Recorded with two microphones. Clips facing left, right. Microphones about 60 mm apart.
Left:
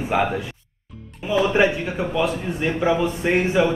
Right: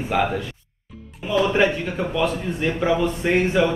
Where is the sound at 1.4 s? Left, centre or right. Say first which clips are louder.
Left 1 dB; centre.